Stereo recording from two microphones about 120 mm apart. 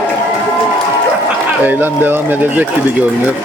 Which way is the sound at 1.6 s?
15° right (ahead or behind).